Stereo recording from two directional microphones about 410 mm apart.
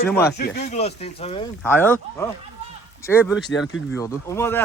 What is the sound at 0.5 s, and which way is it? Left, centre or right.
Speech, centre.